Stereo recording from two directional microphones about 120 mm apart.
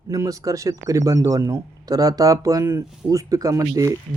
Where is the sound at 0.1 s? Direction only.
30° right (ahead or behind).